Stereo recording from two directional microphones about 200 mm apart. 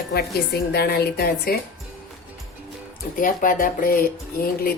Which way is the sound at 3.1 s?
40° left (ahead or behind).